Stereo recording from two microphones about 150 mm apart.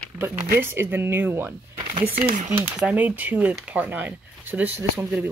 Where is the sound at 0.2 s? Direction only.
15° right (ahead or behind).